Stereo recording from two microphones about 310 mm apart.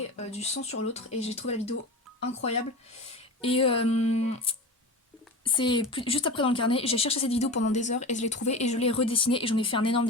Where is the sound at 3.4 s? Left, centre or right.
Centre.